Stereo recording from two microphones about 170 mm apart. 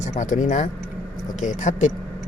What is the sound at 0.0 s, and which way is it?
Speech, 45° left (ahead or behind).